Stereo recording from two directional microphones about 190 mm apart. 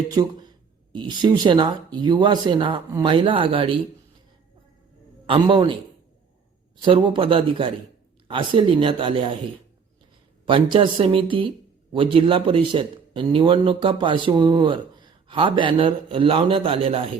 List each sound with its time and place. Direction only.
0.1 s speech: 20° right (ahead or behind)
5.2 s speech: 25° right (ahead or behind)
6.8 s speech: 25° right (ahead or behind)
10.4 s speech: 25° right (ahead or behind)